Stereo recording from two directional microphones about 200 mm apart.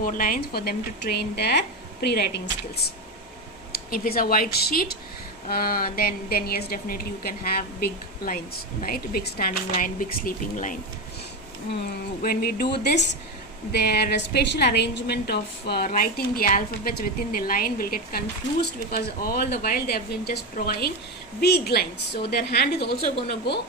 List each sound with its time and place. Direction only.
0.0 s a woman's voice: 45° left (ahead or behind)
12.2 s a woman's voice: 50° left (ahead or behind)